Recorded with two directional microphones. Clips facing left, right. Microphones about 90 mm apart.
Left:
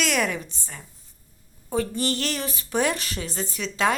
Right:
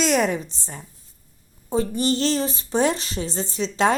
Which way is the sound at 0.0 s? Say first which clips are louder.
Right 5 dB; 30° right (ahead or behind).